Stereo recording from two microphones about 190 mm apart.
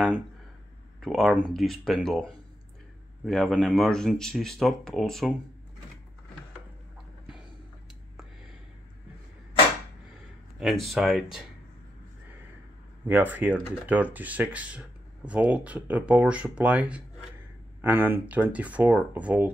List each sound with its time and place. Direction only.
1.0 s speech: centre (ahead or behind)
10.6 s speech: centre (ahead or behind)
13.0 s speech: 10° right (ahead or behind)